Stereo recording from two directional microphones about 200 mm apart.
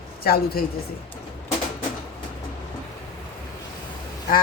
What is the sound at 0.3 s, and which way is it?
Speech, 50° left (ahead or behind).